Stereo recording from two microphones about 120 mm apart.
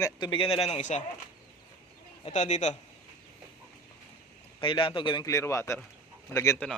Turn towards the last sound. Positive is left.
turn(degrees=25)  # may be behind; listen again after turning